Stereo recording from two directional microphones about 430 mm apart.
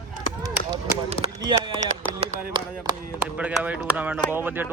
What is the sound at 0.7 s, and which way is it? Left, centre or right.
Speech, centre.